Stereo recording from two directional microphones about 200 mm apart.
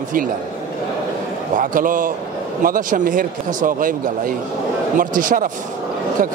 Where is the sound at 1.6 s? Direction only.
40° right (ahead or behind).